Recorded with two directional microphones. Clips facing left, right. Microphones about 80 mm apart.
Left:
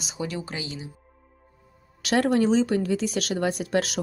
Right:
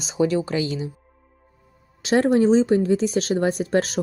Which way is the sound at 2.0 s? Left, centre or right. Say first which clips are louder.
Right 4 dB; right.